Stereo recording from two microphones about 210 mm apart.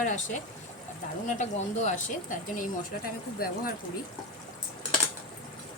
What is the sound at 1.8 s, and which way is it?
Speech, 40° left (ahead or behind).